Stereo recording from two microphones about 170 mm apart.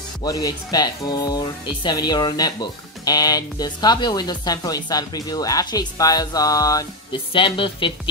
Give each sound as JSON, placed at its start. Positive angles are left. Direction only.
{"t": 0.2, "sound": "speech", "side_deg": 20}